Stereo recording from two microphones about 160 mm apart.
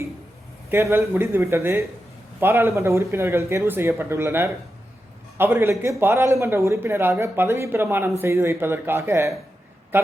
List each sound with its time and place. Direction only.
0.7 s speech: 15° right (ahead or behind)